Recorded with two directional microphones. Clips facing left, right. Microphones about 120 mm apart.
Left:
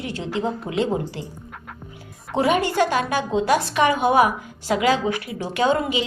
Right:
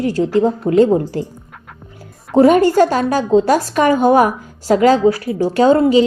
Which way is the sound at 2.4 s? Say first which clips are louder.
Right 9 dB; 40° right (ahead or behind).